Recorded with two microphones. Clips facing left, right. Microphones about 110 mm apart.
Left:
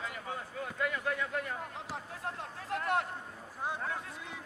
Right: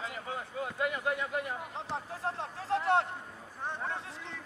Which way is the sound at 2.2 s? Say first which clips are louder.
Right 5 dB; 30° right (ahead or behind).